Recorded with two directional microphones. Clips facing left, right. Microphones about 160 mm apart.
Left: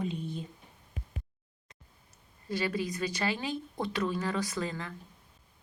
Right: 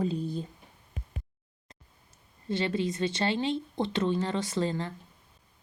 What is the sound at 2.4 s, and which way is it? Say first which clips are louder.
Speech: right 3 dB; 25° right (ahead or behind).